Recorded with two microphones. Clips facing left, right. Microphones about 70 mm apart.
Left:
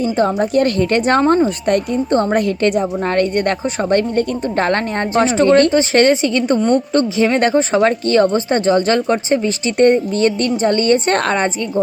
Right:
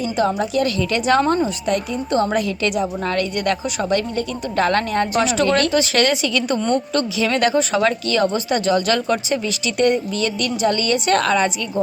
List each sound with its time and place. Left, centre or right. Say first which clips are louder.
0.2 s a woman's voice: left 3 dB; left
1.2 s speech: left 5 dB; left
1.6 s a woman's voice: left 5 dB; left